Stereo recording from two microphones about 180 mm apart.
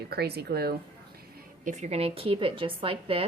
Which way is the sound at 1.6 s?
40° right (ahead or behind).